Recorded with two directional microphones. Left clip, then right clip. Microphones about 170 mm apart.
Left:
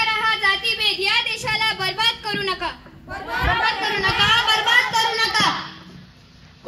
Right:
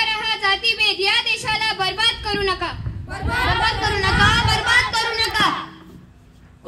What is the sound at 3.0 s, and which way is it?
Speech, 10° right (ahead or behind).